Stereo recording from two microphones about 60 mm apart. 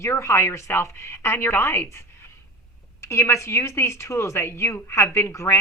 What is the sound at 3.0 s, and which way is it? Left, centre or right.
A woman's voice, left.